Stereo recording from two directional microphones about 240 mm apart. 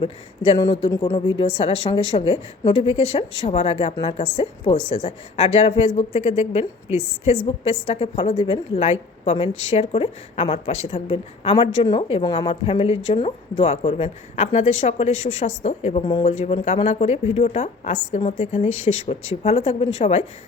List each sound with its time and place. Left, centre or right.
0.0 s a woman's voice: centre